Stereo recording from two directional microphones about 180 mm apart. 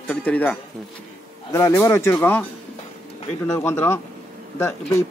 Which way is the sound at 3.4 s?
15° left (ahead or behind).